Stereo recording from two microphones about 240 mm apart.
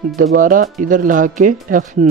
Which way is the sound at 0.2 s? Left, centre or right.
Right.